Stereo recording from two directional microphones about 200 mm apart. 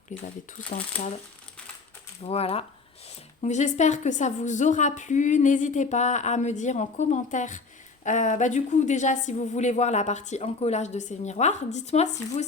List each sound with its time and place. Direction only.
2.2 s a woman's voice: 30° left (ahead or behind)